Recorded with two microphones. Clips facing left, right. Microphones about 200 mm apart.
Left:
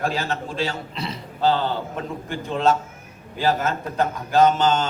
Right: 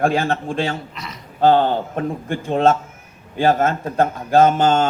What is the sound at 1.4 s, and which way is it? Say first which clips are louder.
A man's voice: right 6 dB; 55° right (ahead or behind).